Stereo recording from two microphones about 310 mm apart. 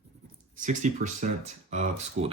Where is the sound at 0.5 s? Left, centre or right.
Right.